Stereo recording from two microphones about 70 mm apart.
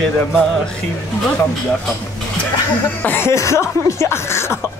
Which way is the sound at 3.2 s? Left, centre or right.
Left.